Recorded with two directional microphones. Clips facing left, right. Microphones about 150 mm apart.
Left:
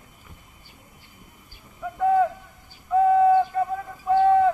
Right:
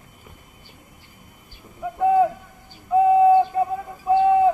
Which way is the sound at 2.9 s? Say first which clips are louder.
Right 3 dB; 15° right (ahead or behind).